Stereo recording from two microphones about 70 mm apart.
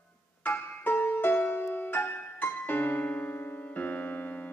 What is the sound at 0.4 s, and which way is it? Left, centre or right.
Music, left.